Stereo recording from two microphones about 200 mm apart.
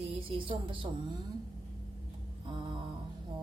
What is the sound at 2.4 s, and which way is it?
Speech, 25° right (ahead or behind).